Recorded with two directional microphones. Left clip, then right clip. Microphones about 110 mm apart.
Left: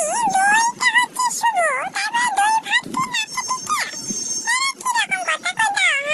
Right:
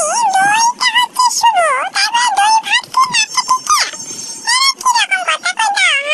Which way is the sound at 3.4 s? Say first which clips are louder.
Right 11 dB; 25° right (ahead or behind).